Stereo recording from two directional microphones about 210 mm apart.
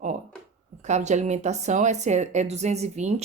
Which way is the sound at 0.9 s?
35° right (ahead or behind).